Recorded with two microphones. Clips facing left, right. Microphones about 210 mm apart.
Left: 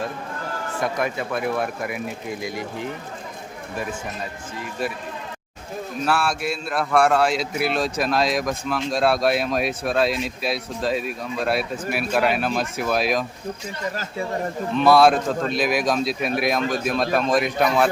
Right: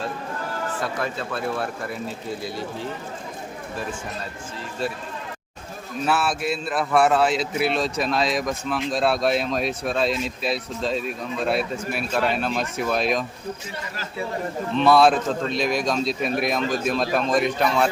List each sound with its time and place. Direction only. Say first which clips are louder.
0.8 s speech: left 6 dB; 15° left (ahead or behind)
6.1 s a man's voice: even; centre (ahead or behind)
14.8 s a man's voice: left 1 dB; centre (ahead or behind)